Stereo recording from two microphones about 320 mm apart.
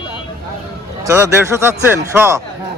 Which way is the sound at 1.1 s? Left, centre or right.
Centre.